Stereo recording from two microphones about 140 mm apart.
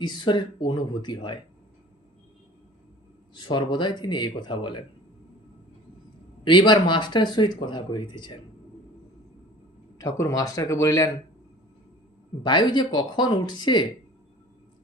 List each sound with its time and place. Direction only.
0.0 s speech: 30° left (ahead or behind)
3.3 s speech: 30° left (ahead or behind)
6.4 s speech: 35° left (ahead or behind)
10.0 s speech: 25° left (ahead or behind)
12.4 s speech: 30° left (ahead or behind)